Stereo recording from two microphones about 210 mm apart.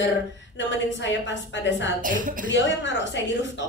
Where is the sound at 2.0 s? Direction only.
40° right (ahead or behind).